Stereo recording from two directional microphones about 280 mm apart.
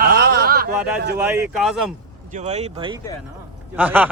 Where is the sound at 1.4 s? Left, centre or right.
Centre.